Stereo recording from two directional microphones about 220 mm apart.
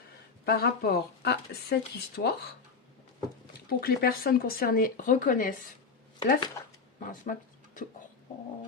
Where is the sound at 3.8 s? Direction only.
45° left (ahead or behind).